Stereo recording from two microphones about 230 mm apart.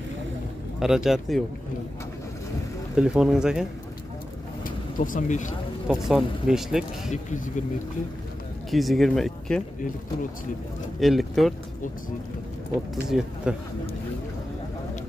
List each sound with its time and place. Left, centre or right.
0.7 s speech: centre
3.0 s speech: centre
4.6 s speech: left
5.9 s speech: centre
7.1 s speech: left
8.6 s speech: centre
11.0 s speech: centre
13.1 s speech: centre